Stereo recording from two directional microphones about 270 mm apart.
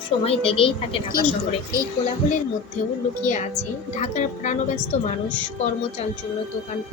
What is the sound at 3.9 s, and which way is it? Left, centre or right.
A woman's voice, left.